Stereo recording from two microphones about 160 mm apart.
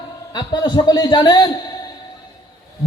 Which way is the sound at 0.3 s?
25° left (ahead or behind).